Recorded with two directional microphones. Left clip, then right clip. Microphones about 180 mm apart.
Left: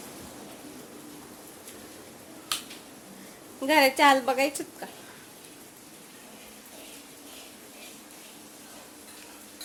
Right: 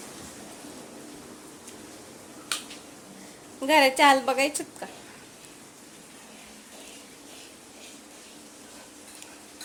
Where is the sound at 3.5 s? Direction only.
Centre (ahead or behind).